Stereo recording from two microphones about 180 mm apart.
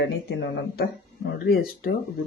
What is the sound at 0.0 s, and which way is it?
Speech, 70° left (ahead or behind).